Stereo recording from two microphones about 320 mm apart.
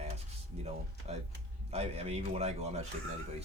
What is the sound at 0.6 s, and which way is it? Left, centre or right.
A man's voice, centre.